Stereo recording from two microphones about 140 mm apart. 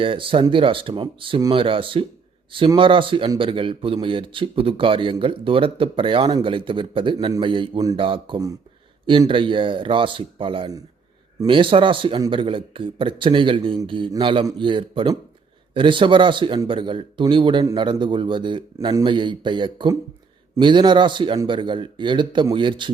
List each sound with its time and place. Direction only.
0.0 s a man's voice: 40° right (ahead or behind)